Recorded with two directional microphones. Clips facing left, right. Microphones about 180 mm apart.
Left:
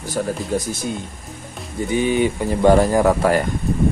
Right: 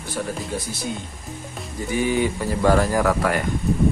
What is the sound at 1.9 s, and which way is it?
Speech, 20° left (ahead or behind).